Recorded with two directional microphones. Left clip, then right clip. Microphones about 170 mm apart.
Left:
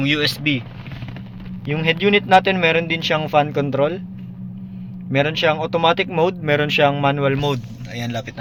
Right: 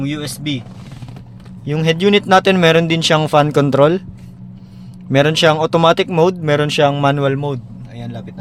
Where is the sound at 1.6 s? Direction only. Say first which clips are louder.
Right 3 dB; 50° right (ahead or behind); by 4.0 s 70° right (ahead or behind).